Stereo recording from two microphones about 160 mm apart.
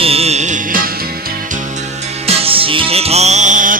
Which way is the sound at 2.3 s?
35° right (ahead or behind).